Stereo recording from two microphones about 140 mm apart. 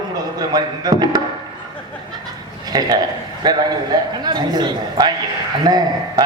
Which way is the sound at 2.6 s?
30° right (ahead or behind).